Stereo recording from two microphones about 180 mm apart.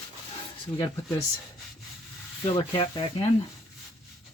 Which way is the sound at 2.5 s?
30° left (ahead or behind).